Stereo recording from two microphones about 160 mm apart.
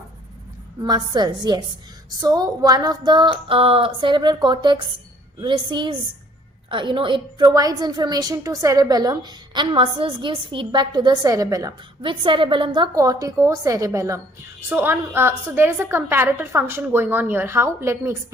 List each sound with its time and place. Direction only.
0.8 s a woman's voice: 25° right (ahead or behind)